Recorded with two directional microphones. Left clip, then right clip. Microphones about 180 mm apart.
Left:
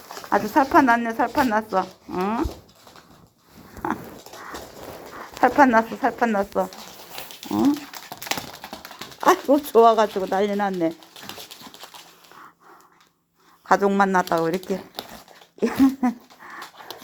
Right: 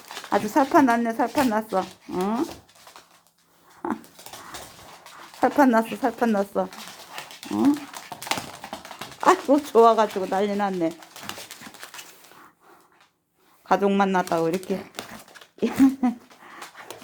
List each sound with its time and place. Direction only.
0.3 s speech: 5° left (ahead or behind)
3.8 s dog: 5° right (ahead or behind)
5.4 s speech: 5° right (ahead or behind)
7.2 s dog: centre (ahead or behind)
8.0 s a sound: 5° left (ahead or behind)
9.0 s speech: 10° left (ahead or behind)
13.7 s speech: 5° left (ahead or behind)
15.0 s crumpling: 5° left (ahead or behind)
15.6 s a sound: 5° left (ahead or behind)